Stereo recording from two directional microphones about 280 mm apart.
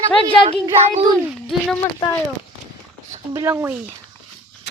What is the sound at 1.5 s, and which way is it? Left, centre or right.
Speech, centre.